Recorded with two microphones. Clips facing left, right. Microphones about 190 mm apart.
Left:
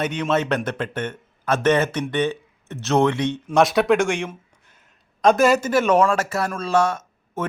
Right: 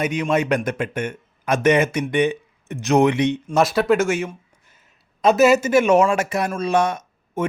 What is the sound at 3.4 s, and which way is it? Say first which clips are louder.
A man's voice: left 5 dB; centre (ahead or behind).